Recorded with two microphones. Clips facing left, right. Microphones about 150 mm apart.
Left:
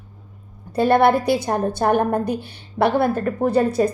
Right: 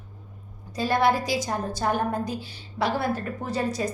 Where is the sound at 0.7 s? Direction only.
60° left (ahead or behind).